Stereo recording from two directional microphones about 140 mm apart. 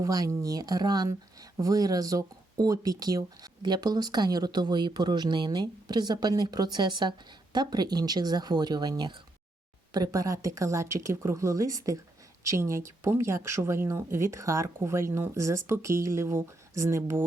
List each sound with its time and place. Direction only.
0.0 s speech: 25° right (ahead or behind)